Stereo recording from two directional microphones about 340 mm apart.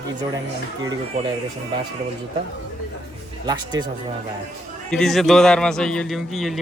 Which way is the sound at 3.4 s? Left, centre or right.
Centre.